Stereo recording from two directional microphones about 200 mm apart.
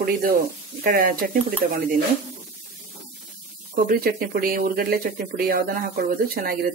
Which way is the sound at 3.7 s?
45° right (ahead or behind).